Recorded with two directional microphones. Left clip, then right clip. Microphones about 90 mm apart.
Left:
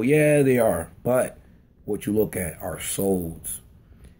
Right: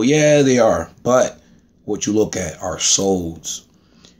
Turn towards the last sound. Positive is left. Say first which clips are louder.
# right 10 dB
turn(degrees=-20)  # may be behind; listen again after turning